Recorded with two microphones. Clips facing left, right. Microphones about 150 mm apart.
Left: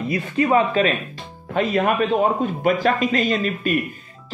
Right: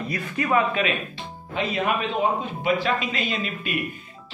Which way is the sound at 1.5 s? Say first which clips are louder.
Left 5 dB; 50° left (ahead or behind).